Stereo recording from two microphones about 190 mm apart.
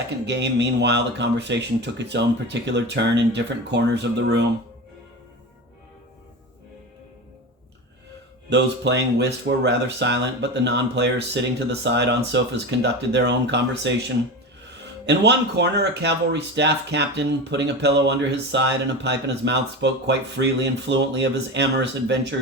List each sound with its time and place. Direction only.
0.3 s speech: 65° right (ahead or behind)
8.4 s speech: 65° right (ahead or behind)
15.0 s speech: 65° right (ahead or behind)